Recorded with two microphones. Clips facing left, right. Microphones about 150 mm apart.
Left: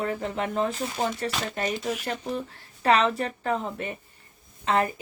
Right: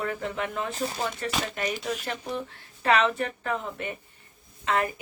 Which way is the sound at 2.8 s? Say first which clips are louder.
Left 1 dB; 35° left (ahead or behind).